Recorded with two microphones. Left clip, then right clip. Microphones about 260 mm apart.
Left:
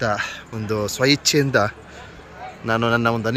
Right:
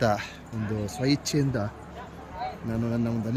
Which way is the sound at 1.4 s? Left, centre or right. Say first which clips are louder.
Left 11 dB; left.